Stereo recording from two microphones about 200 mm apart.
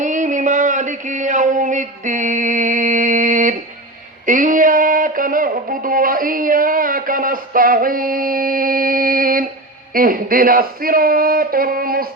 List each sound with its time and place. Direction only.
0.0 s a sound: 40° right (ahead or behind)
4.3 s music: 40° right (ahead or behind)
9.9 s a man's voice: 45° right (ahead or behind)